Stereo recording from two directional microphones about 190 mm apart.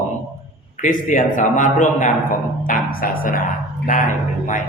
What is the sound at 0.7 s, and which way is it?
A man's voice, 40° left (ahead or behind).